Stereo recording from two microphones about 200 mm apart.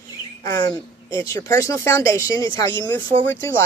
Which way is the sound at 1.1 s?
15° left (ahead or behind).